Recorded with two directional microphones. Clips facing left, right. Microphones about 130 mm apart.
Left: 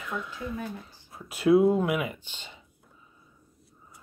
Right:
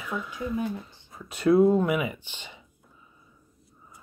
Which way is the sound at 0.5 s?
20° right (ahead or behind).